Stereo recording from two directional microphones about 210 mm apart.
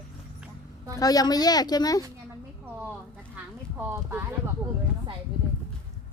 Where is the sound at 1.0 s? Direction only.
15° left (ahead or behind).